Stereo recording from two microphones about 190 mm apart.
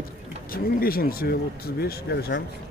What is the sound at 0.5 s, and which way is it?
Speech, 50° left (ahead or behind).